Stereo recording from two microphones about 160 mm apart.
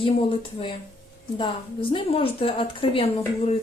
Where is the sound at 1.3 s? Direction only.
35° left (ahead or behind).